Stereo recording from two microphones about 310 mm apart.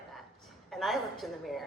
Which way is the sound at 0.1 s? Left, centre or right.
Centre.